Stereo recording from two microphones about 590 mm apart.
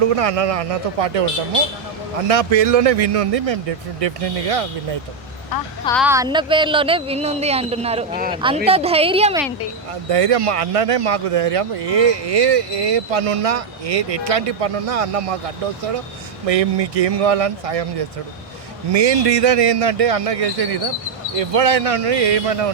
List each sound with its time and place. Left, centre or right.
0.0 s speech: right
2.2 s speech: right
5.8 s speech: centre
10.1 s speech: right
16.5 s speech: right